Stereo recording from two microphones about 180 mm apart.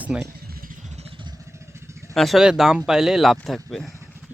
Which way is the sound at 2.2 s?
Centre (ahead or behind).